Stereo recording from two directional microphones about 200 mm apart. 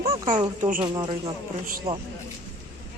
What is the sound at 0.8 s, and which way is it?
Speech, 25° right (ahead or behind).